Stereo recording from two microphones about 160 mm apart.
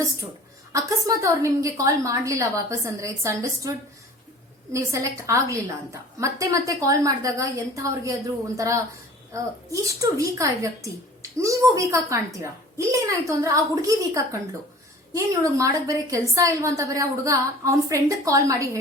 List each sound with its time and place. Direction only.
0.7 s a child's voice: 20° right (ahead or behind)
9.9 s a child's voice: 20° right (ahead or behind)